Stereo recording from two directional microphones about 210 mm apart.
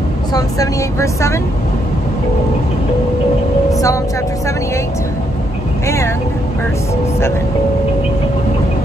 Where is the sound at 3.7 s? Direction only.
15° left (ahead or behind).